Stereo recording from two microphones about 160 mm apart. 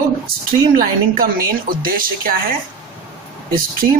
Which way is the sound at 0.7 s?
65° right (ahead or behind).